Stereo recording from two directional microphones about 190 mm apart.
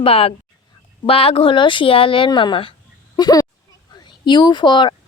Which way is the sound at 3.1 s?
20° left (ahead or behind).